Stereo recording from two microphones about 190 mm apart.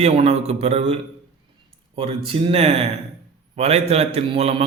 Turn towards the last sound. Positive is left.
turn(degrees=-30)  # may be behind; listen again after turning